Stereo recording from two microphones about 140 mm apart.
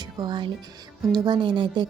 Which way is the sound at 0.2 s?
30° right (ahead or behind).